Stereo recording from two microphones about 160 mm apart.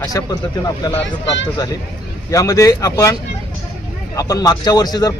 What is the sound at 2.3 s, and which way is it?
Speech, 20° left (ahead or behind).